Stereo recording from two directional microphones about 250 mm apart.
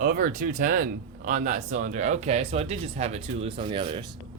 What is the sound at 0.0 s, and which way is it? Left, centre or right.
Speech, right.